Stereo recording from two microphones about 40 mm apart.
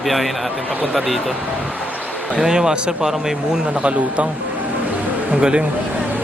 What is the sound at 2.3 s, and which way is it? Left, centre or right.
Speech, centre.